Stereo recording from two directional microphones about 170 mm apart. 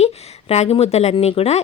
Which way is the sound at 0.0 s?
40° left (ahead or behind).